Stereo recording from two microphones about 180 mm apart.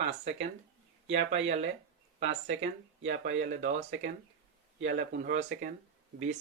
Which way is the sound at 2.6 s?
90° right.